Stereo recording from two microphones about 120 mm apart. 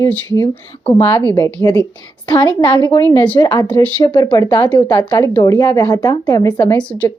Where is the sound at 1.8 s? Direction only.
40° left (ahead or behind).